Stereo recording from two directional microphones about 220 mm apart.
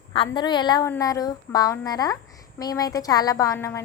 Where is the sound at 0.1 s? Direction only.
20° left (ahead or behind).